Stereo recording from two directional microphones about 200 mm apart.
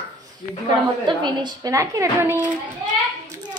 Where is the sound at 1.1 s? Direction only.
20° right (ahead or behind).